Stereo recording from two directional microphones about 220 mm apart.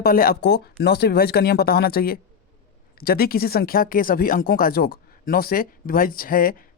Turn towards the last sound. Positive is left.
turn(degrees=40)  # may be behind; listen again after turning